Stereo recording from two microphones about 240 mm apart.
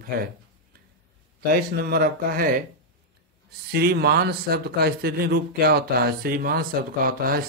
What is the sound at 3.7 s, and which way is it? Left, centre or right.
Speech, right.